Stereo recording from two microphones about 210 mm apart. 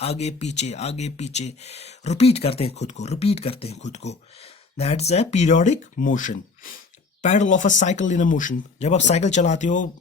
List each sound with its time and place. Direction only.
0.0 s speech: 30° left (ahead or behind)